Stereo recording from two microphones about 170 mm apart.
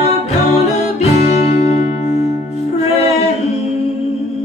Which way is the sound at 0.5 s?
40° left (ahead or behind).